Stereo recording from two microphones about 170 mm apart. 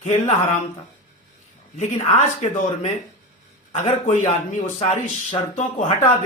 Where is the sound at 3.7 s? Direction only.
45° left (ahead or behind).